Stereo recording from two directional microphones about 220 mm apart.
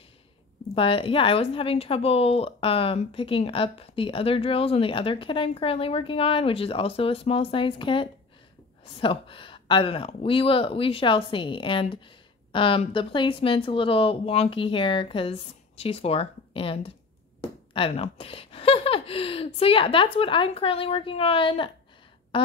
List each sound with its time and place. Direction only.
0.7 s speech: 25° left (ahead or behind)